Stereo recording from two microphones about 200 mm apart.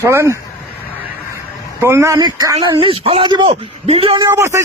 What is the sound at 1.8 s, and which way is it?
Speech, 15° right (ahead or behind).